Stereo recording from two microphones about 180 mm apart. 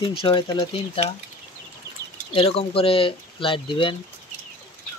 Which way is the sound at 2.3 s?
30° left (ahead or behind).